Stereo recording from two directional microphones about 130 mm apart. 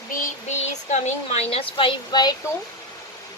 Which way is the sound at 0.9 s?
55° left (ahead or behind).